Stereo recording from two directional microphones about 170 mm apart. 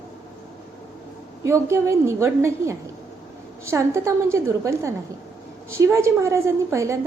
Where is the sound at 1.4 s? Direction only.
15° right (ahead or behind).